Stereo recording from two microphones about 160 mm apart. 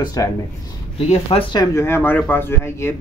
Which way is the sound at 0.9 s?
35° left (ahead or behind).